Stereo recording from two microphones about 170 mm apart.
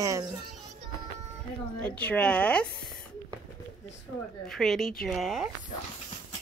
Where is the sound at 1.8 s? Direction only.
10° left (ahead or behind).